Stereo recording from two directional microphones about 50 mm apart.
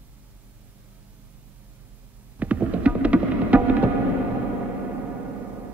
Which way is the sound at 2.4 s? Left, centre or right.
Right.